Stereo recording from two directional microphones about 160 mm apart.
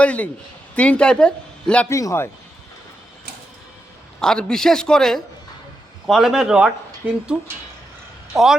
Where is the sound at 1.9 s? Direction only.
20° left (ahead or behind).